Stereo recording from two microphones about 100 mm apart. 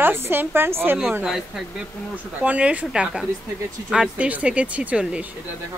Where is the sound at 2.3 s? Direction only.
15° right (ahead or behind).